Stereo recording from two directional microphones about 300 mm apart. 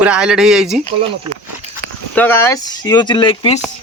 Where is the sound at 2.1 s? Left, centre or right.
Centre.